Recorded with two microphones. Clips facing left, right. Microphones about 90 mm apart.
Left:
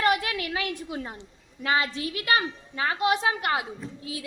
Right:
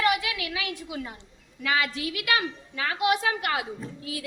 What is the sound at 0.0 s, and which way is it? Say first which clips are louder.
A woman's voice: left 1 dB; 45° left (ahead or behind).